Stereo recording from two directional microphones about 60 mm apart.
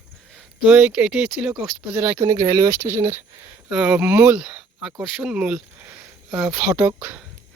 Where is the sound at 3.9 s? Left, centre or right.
Right.